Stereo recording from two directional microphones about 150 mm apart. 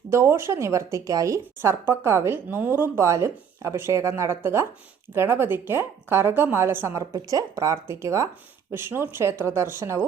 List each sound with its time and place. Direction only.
0.1 s speech: 15° right (ahead or behind)